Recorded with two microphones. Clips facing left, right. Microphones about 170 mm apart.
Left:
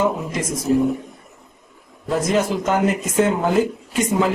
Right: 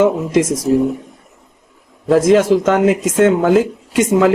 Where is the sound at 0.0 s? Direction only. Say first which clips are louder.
Right 8 dB; 90° right.